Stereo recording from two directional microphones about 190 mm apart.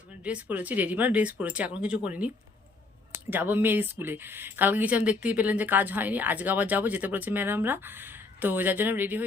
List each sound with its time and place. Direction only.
0.2 s speech: 5° right (ahead or behind)